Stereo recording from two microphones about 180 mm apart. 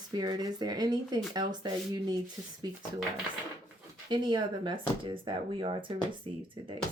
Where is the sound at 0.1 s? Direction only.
20° right (ahead or behind).